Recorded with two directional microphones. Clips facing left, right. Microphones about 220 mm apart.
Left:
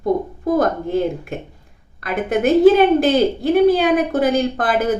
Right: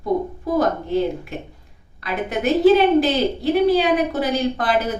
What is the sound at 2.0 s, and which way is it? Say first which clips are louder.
A woman's voice: left 5 dB; 50° left (ahead or behind).